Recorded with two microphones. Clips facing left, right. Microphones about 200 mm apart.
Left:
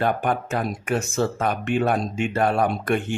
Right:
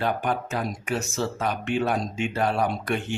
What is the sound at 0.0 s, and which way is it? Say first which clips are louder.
Speech: left 3 dB; 50° left (ahead or behind).